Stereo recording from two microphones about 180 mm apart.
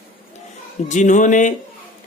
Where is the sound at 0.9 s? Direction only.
45° left (ahead or behind).